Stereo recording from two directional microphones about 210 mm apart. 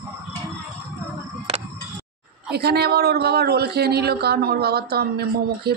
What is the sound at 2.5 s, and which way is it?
Speech, 50° right (ahead or behind).